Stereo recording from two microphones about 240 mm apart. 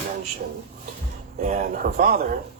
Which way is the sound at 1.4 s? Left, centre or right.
Right.